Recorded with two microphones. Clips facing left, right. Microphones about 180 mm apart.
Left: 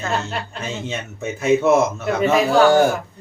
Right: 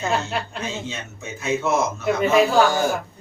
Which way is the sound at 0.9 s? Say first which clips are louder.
Left 7 dB; 55° left (ahead or behind).